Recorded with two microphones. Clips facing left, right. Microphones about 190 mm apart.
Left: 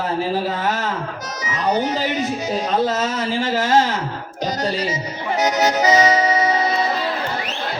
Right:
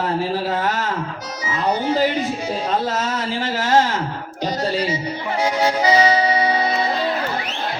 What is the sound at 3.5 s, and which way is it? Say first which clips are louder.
Speech: left 3 dB; 50° right (ahead or behind).